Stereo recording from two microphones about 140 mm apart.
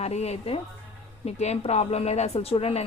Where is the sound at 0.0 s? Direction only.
50° left (ahead or behind).